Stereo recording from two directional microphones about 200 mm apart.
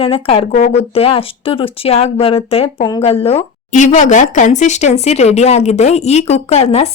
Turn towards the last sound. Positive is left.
turn(degrees=30)  # may be behind; listen again after turning